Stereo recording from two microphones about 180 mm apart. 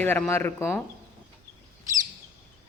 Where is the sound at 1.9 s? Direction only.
15° right (ahead or behind).